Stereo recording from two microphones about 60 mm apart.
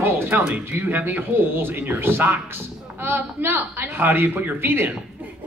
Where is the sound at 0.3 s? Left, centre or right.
Right.